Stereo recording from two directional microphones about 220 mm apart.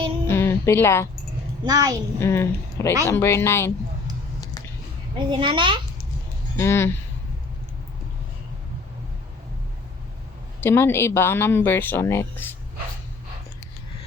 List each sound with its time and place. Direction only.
0.3 s speech: 10° left (ahead or behind)
1.6 s a child's voice: 15° right (ahead or behind)
2.1 s speech: 10° left (ahead or behind)
5.1 s a child's voice: 20° right (ahead or behind)
6.6 s speech: 10° left (ahead or behind)
10.6 s speech: 10° left (ahead or behind)